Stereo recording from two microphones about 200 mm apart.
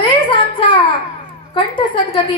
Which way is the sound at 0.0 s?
25° left (ahead or behind).